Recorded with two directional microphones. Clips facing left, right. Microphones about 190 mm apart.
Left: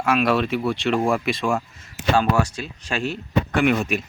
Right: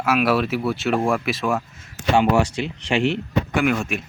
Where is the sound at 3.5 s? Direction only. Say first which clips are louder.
Left 2 dB; centre (ahead or behind).